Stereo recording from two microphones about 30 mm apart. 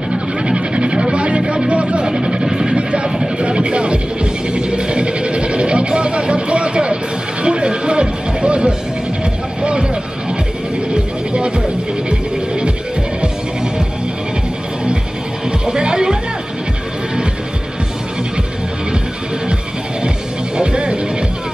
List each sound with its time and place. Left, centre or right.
0.1 s music: right
2.0 s vehicle: right
2.7 s music: right
11.3 s music: right
15.6 s music: right
20.5 s music: right